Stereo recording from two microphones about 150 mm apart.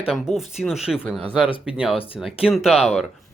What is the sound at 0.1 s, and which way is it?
Speech, centre (ahead or behind).